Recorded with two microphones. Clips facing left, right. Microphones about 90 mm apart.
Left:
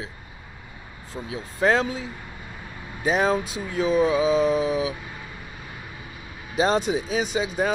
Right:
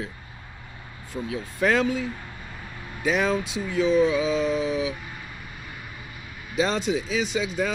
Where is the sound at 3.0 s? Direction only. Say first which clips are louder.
Left 2 dB; 40° left (ahead or behind).